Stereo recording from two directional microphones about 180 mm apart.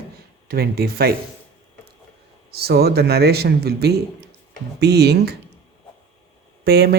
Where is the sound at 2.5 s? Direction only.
60° right (ahead or behind).